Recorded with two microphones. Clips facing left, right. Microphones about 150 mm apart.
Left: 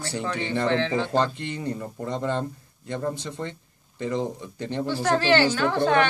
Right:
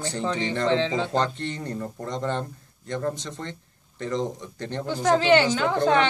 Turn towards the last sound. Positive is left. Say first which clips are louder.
# even
turn(degrees=-20)  # may be behind; listen again after turning